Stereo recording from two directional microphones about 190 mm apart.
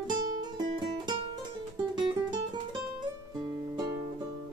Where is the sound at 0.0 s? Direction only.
20° right (ahead or behind).